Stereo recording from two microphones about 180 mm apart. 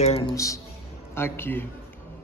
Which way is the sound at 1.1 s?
10° left (ahead or behind).